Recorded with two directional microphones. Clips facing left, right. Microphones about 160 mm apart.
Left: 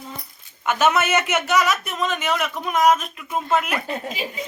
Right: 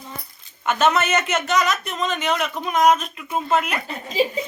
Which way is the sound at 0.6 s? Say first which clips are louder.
Even; 5° left (ahead or behind).